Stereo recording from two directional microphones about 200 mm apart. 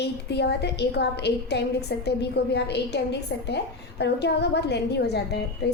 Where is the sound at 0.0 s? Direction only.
55° left (ahead or behind).